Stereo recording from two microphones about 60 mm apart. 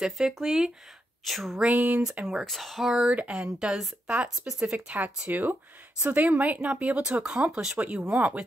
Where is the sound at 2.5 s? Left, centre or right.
Centre.